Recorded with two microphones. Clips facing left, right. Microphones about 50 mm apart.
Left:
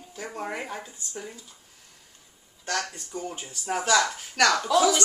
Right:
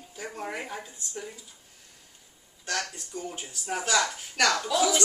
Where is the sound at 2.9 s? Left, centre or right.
Centre.